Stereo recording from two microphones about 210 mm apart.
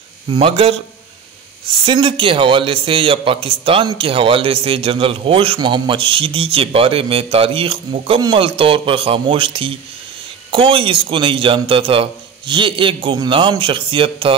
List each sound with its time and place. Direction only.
0.3 s a man's voice: 25° right (ahead or behind)
1.9 s a man's voice: 25° right (ahead or behind)